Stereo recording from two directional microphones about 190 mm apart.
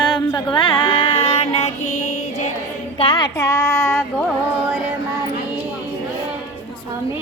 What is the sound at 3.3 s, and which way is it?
Child singing, 15° left (ahead or behind).